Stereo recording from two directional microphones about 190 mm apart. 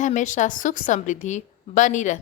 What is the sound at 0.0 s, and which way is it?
A woman's voice, 40° left (ahead or behind).